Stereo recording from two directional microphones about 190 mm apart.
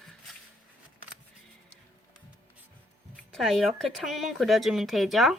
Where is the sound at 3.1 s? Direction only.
Centre (ahead or behind).